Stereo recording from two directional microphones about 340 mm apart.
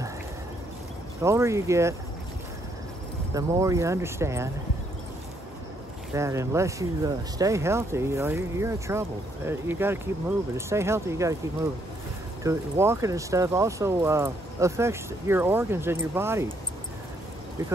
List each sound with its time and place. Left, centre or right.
1.2 s speech: centre
3.3 s speech: centre
6.1 s speech: centre
12.4 s speech: centre